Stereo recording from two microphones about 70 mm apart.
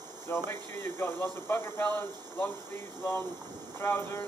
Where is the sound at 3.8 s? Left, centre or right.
Left.